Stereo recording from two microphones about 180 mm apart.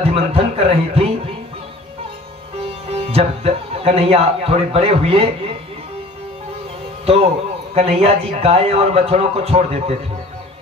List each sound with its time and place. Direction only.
0.0 s speech: 35° right (ahead or behind)
2.9 s speech: 35° right (ahead or behind)
7.7 s speech: 35° right (ahead or behind)